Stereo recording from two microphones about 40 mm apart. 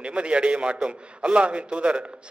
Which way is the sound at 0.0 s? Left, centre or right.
Right.